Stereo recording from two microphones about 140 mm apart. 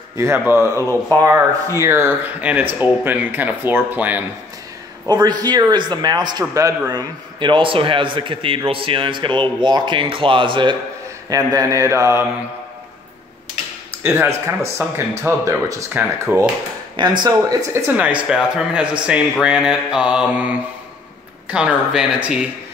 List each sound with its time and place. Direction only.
0.2 s a man's voice: 20° right (ahead or behind)
5.0 s a man's voice: 30° right (ahead or behind)
11.2 s a man's voice: 25° right (ahead or behind)
14.0 s speech: 15° right (ahead or behind)
17.0 s a man's voice: 35° right (ahead or behind)
17.3 s speech: 20° right (ahead or behind)
19.4 s mantra: 5° right (ahead or behind)
21.5 s speech: 10° right (ahead or behind)